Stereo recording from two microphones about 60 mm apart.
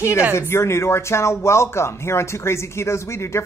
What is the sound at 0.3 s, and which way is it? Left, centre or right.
Speech, left.